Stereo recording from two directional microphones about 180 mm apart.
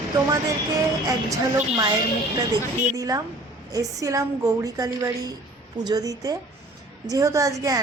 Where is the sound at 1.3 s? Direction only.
20° right (ahead or behind).